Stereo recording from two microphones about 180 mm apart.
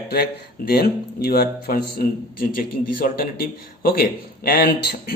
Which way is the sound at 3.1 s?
55° left (ahead or behind).